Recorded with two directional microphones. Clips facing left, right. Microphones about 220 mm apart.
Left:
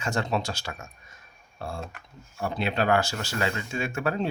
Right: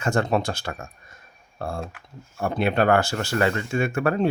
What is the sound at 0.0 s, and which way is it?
Speech, 55° right (ahead or behind).